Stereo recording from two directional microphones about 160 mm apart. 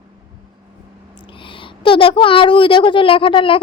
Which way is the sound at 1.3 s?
30° left (ahead or behind).